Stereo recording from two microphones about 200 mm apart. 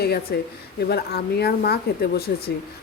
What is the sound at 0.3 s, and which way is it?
Speech, 50° left (ahead or behind).